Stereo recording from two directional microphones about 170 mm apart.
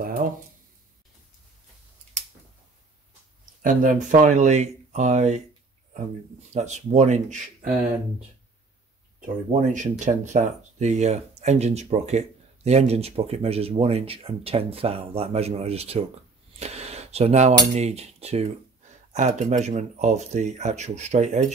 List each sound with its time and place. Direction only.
0.0 s speech: 55° right (ahead or behind)
3.6 s speech: 50° right (ahead or behind)
9.2 s speech: 45° right (ahead or behind)
16.5 s a sound: 40° right (ahead or behind)
17.7 s speech: 40° right (ahead or behind)